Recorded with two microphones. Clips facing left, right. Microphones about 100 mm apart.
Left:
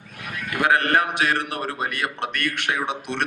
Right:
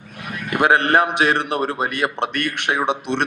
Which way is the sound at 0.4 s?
25° right (ahead or behind).